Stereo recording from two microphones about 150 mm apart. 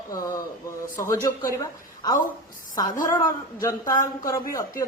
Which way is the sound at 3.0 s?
25° left (ahead or behind).